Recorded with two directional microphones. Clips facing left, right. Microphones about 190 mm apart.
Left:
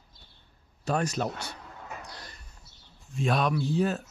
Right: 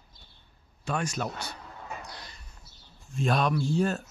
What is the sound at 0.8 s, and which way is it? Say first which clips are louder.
Speech: left 3 dB; 35° left (ahead or behind).